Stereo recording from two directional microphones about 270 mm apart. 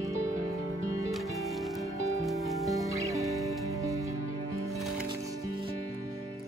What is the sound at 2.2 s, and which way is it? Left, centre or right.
Music, centre.